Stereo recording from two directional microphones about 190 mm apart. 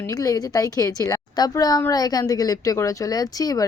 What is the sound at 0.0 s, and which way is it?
Speech, 20° left (ahead or behind).